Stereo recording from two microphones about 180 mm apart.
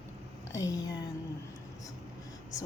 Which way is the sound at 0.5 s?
20° left (ahead or behind).